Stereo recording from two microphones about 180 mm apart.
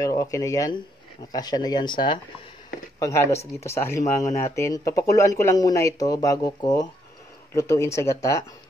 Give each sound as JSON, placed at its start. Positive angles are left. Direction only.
{"t": 0.0, "sound": "speech", "side_deg": 20}